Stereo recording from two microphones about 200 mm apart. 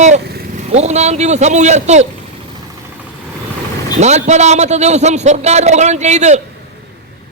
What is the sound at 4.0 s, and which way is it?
A man's voice, 35° right (ahead or behind).